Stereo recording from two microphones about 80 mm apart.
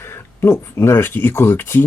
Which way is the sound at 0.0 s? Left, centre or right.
Left.